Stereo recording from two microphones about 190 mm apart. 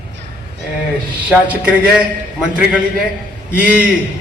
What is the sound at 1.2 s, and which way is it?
A man's voice, 5° right (ahead or behind).